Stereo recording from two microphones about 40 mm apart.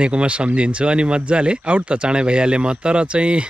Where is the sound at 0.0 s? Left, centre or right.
Right.